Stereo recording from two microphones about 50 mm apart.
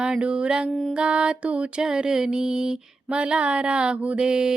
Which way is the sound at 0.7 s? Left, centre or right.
Centre.